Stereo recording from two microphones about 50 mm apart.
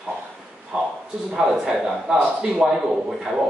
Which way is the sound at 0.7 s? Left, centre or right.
Centre.